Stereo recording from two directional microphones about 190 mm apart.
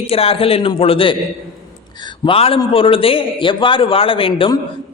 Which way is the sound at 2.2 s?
30° left (ahead or behind).